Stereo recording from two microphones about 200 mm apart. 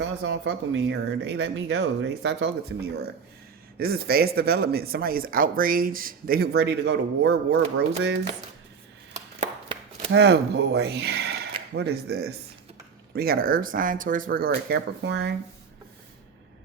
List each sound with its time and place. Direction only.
0.0 s speech: 60° right (ahead or behind)
9.1 s chopping: 35° right (ahead or behind)
10.1 s speech: 55° right (ahead or behind)